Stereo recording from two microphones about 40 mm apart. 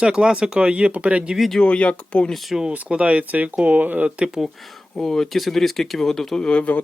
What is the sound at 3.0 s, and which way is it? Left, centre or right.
Speech, right.